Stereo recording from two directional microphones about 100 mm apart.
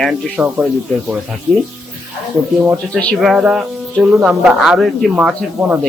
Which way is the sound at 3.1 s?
5° right (ahead or behind).